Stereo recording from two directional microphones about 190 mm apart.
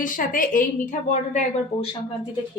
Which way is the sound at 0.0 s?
45° left (ahead or behind).